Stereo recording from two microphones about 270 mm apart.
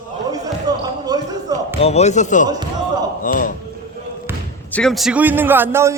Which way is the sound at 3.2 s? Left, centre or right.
Left.